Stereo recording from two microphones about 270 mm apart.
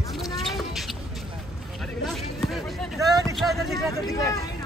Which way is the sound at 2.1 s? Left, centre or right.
Centre.